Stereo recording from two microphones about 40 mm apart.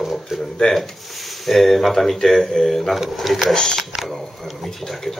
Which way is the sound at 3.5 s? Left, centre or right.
Centre.